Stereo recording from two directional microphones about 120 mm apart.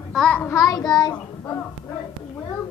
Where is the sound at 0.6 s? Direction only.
30° left (ahead or behind).